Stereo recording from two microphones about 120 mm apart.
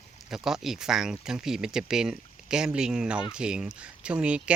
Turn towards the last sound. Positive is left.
turn(degrees=-10)  # may be behind; listen again after turning